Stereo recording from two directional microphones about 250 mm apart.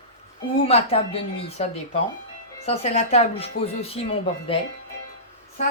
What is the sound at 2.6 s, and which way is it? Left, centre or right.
Speech, left.